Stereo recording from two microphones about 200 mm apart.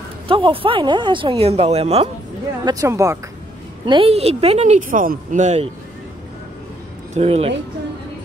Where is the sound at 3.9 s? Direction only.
30° right (ahead or behind).